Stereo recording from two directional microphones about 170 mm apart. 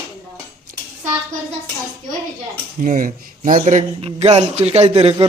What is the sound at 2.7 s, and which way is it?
A man's voice, 45° right (ahead or behind).